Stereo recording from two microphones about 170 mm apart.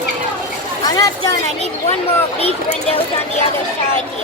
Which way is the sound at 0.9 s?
20° left (ahead or behind).